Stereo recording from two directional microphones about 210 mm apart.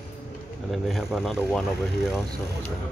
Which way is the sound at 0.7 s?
Centre (ahead or behind).